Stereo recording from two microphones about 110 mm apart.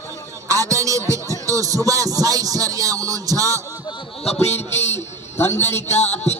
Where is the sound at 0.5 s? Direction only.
30° right (ahead or behind).